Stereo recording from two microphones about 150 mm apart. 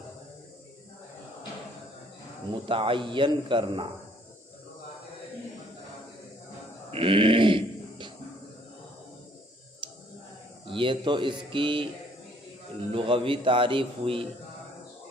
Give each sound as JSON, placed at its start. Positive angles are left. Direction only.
{"t": 2.6, "sound": "a man's voice", "side_deg": -35}
{"t": 6.9, "sound": "a sound", "side_deg": -40}
{"t": 10.7, "sound": "a man's voice", "side_deg": -35}
{"t": 12.9, "sound": "a man's voice", "side_deg": -35}